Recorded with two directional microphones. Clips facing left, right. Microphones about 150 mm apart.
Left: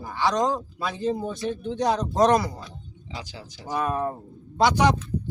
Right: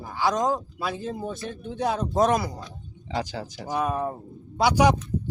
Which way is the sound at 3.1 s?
50° right (ahead or behind).